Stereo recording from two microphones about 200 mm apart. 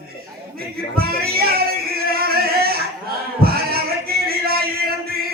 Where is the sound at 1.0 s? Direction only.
50° right (ahead or behind).